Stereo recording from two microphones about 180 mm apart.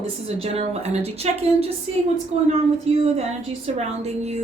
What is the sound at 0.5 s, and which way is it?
A woman's voice, 35° right (ahead or behind).